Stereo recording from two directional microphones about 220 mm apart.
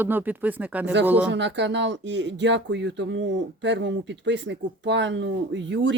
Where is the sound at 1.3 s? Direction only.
55° right (ahead or behind).